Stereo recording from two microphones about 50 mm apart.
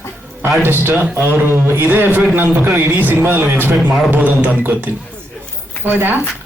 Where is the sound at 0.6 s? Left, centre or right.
Right.